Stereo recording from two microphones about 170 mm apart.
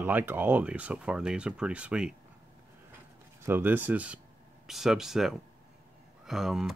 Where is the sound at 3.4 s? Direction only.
10° right (ahead or behind).